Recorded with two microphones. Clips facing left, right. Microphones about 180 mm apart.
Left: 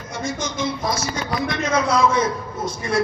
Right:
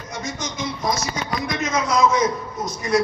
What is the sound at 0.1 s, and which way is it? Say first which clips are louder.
Speech: left 4 dB; 30° left (ahead or behind).